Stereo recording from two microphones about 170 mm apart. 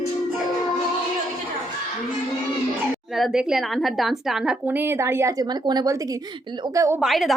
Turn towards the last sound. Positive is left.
turn(degrees=0)  # may be behind; listen again after turning